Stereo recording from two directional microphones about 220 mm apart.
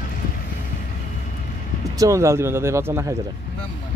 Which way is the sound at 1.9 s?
15° right (ahead or behind).